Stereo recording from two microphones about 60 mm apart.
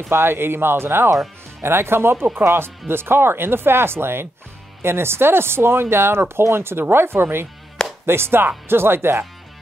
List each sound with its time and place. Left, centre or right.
0.1 s speech: right